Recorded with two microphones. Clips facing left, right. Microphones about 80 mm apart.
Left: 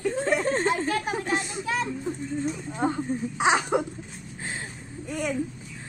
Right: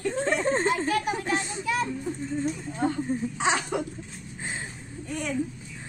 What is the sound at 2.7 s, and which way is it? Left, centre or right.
Speech, left.